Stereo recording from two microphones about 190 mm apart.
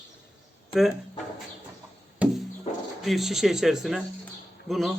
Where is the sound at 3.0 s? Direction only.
Centre (ahead or behind).